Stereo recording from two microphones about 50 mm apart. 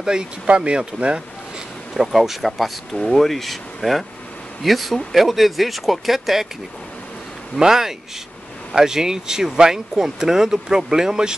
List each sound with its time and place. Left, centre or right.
0.0 s speech: centre
2.0 s speech: centre
7.5 s speech: centre